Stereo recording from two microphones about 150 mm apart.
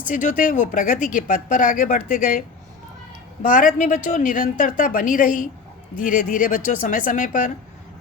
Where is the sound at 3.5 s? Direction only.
60° left (ahead or behind).